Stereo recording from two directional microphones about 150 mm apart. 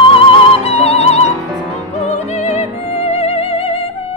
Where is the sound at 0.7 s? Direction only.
45° left (ahead or behind).